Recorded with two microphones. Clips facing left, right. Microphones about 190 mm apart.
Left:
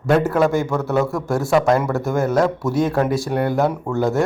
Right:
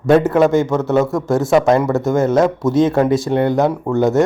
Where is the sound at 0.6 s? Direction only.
20° right (ahead or behind).